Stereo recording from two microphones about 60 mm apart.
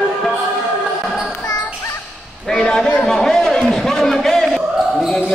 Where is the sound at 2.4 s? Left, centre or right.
Centre.